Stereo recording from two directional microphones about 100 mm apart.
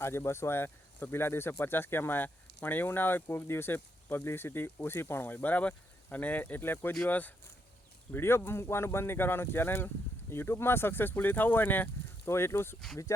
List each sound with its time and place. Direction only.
0.0 s speech: 25° left (ahead or behind)